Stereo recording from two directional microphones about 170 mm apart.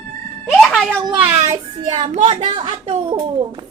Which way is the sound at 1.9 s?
45° right (ahead or behind).